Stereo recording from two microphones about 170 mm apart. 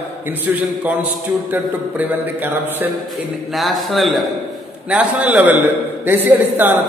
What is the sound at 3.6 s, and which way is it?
A man's voice, centre (ahead or behind).